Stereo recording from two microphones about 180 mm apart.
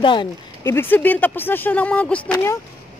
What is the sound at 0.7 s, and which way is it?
Speech, 10° left (ahead or behind).